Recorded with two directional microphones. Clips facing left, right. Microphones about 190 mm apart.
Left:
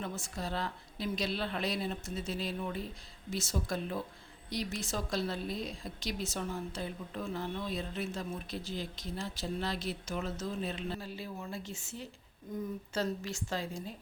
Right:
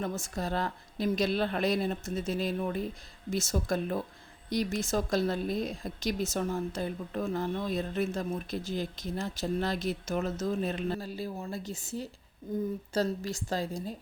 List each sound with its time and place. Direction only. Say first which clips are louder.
0.0 s a woman's voice: right 5 dB; 45° right (ahead or behind)